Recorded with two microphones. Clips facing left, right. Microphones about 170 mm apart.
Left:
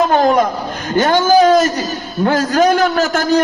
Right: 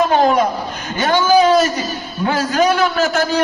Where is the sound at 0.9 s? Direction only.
45° left (ahead or behind).